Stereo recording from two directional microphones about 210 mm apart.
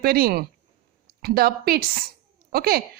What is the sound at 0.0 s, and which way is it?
A woman's voice, 45° right (ahead or behind).